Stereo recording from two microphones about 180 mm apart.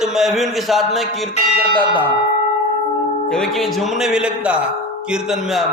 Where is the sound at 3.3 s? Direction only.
5° left (ahead or behind).